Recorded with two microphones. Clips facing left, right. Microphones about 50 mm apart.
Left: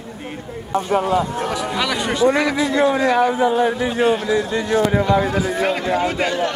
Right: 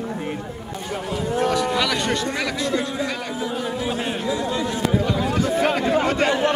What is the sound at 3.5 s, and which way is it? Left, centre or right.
Speech, left.